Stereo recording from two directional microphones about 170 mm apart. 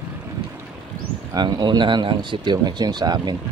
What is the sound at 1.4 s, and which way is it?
Speech, 25° right (ahead or behind).